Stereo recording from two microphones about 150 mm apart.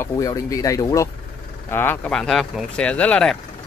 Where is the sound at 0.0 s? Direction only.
25° left (ahead or behind).